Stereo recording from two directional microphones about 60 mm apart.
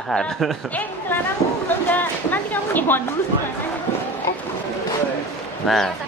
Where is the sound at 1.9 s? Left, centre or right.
Left.